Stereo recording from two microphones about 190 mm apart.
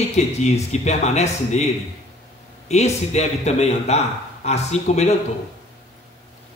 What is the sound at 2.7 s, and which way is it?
A man's voice, 35° left (ahead or behind).